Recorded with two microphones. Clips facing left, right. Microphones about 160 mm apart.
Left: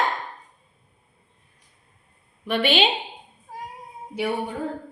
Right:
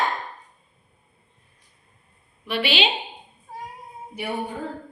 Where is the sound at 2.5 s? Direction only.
50° left (ahead or behind).